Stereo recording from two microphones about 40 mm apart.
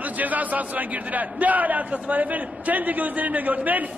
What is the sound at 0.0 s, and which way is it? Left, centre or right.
A man's voice, right.